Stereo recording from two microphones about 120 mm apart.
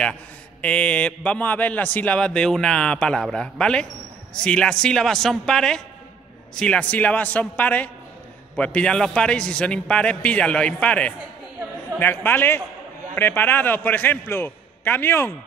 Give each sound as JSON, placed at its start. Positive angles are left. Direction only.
{"t": 0.6, "sound": "a man's voice", "side_deg": 10}